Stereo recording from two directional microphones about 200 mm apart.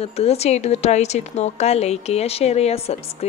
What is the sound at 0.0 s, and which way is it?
A woman's voice, 30° left (ahead or behind).